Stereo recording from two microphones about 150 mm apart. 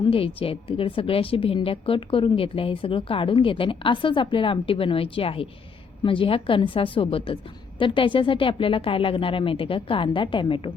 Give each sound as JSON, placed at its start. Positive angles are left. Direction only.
{"t": 0.0, "sound": "a woman's voice", "side_deg": 35}